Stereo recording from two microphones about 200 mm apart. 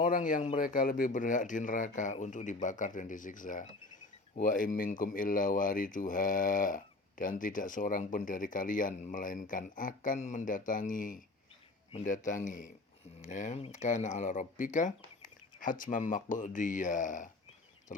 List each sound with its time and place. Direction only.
0.0 s speech: 40° left (ahead or behind)